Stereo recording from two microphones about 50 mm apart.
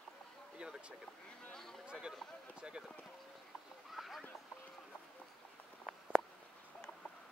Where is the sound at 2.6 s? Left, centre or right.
Centre.